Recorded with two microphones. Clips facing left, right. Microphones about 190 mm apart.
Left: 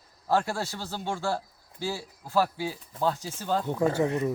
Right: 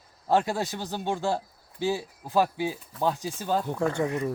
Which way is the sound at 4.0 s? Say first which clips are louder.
Left 1 dB; 5° left (ahead or behind).